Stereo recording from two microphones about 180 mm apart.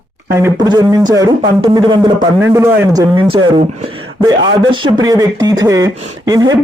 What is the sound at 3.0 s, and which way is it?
Speech, 30° right (ahead or behind).